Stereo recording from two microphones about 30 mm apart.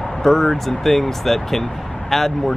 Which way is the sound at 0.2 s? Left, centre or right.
Centre.